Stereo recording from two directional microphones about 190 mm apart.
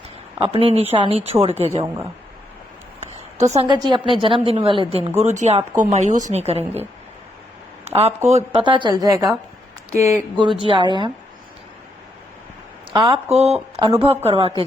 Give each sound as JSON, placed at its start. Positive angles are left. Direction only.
{"t": 0.3, "sound": "a woman's voice", "side_deg": -30}
{"t": 3.0, "sound": "a sound", "side_deg": -35}
{"t": 3.7, "sound": "a woman's voice", "side_deg": -25}
{"t": 7.9, "sound": "a woman's voice", "side_deg": -35}
{"t": 12.9, "sound": "a woman's voice", "side_deg": -25}
{"t": 13.7, "sound": "a woman's voice", "side_deg": -20}